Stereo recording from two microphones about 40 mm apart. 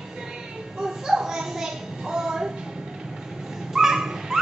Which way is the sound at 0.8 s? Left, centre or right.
Centre.